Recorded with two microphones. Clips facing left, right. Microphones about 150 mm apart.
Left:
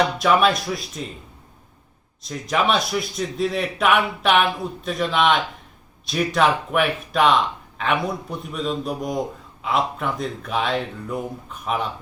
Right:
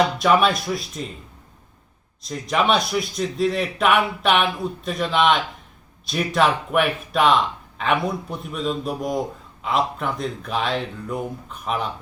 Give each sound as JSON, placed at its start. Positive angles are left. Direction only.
{"t": 0.2, "sound": "speech", "side_deg": 0}
{"t": 2.2, "sound": "speech", "side_deg": 0}